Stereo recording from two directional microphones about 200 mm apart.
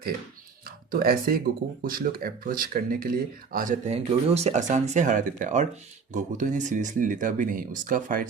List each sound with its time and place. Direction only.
0.9 s speech: 45° right (ahead or behind)